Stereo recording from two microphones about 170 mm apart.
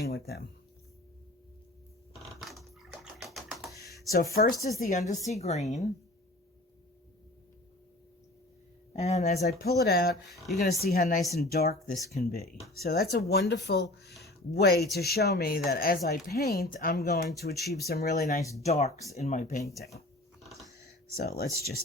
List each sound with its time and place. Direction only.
0.0 s speech: 65° left (ahead or behind)
2.4 s typewriter: centre (ahead or behind)
4.1 s speech: 60° left (ahead or behind)
4.8 s a woman's voice: 45° left (ahead or behind)
8.9 s speech: 40° left (ahead or behind)
9.6 s speech: 70° left (ahead or behind)
14.1 s a sound: centre (ahead or behind)
14.5 s speech: 70° left (ahead or behind)
18.6 s a woman's voice: 40° left (ahead or behind)
21.2 s speech: 65° left (ahead or behind)